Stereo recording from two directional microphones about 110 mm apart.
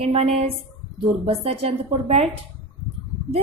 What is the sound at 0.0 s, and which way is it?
A woman's voice, 70° right (ahead or behind).